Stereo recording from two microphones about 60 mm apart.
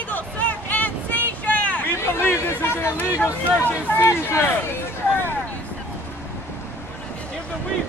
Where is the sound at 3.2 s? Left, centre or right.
Left.